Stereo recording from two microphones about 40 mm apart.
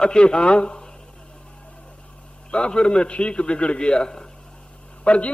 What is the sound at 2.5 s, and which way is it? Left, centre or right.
A man's voice, left.